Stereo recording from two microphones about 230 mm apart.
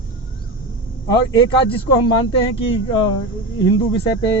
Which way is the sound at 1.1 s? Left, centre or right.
Left.